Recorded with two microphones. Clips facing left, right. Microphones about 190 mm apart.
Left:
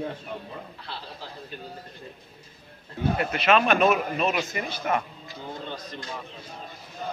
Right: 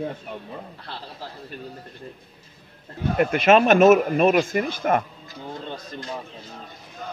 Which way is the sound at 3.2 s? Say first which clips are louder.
Right 7 dB; 50° right (ahead or behind).